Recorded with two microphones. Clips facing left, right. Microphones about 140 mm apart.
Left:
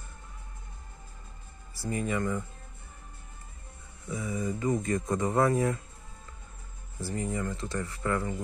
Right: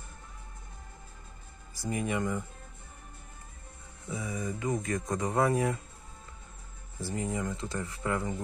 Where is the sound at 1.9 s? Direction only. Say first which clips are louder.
Left 1 dB; 10° right (ahead or behind).